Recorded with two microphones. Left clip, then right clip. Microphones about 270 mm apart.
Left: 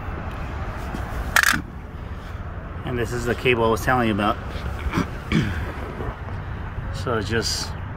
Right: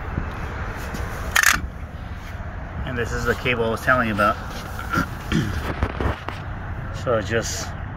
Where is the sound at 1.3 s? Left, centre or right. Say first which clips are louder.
Right 1 dB; right.